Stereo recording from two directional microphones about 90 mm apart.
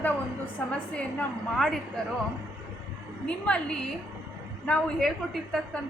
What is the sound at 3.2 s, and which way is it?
A woman's voice, 10° left (ahead or behind).